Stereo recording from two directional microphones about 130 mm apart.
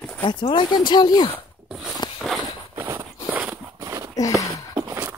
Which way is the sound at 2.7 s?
20° right (ahead or behind).